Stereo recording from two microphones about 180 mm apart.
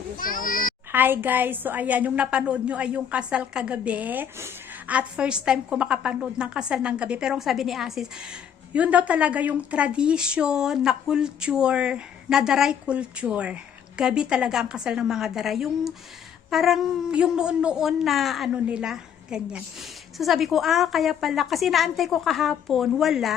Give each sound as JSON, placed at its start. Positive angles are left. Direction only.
{"t": 0.2, "sound": "children playing", "side_deg": 50}
{"t": 0.9, "sound": "a woman's voice", "side_deg": -10}